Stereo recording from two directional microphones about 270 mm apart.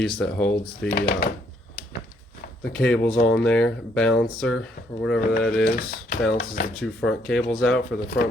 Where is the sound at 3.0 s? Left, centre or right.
Left.